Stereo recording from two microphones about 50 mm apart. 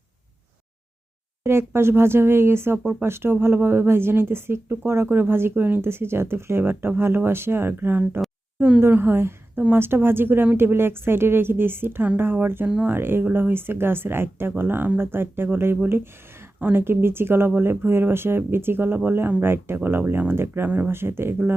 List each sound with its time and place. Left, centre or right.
1.5 s speech: right
8.5 s speech: right
8.8 s speech: right
20.7 s speech: right
20.9 s speech: right